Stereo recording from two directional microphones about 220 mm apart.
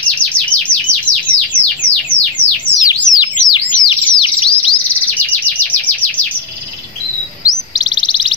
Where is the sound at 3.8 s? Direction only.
25° left (ahead or behind).